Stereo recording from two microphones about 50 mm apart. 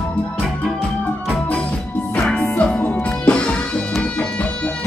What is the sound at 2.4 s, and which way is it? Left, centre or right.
Music, left.